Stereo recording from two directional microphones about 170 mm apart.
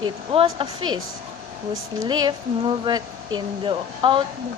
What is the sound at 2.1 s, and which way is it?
Speech, 25° right (ahead or behind).